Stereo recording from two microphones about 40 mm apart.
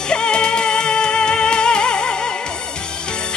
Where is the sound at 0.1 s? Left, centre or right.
Left.